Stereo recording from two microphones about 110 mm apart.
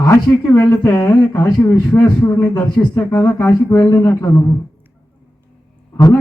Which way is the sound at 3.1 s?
25° left (ahead or behind).